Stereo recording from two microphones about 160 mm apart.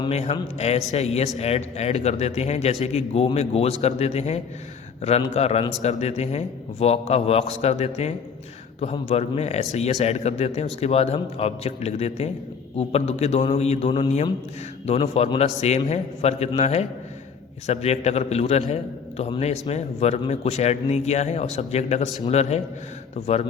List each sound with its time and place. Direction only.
0.1 s a man's voice: 40° left (ahead or behind)